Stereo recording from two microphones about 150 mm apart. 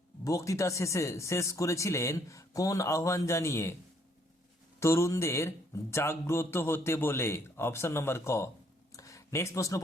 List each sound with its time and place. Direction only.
0.3 s speech: 20° left (ahead or behind)
4.8 s speech: 20° left (ahead or behind)
8.9 s a sound: 20° left (ahead or behind)